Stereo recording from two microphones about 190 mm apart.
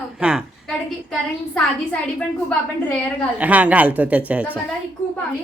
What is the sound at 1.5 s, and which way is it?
Speech, 5° left (ahead or behind).